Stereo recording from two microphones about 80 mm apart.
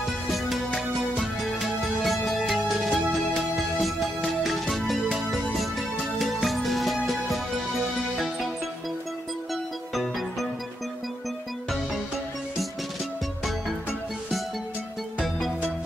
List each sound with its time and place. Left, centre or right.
0.0 s music: centre